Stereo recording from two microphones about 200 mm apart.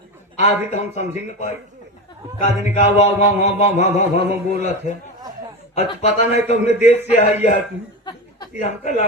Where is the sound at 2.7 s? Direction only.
35° left (ahead or behind).